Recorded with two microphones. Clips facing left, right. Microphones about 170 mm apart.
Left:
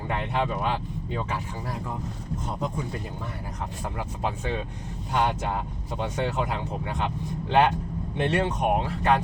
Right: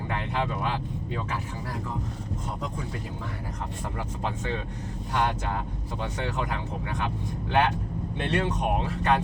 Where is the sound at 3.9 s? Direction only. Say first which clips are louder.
Left 2 dB; 15° left (ahead or behind).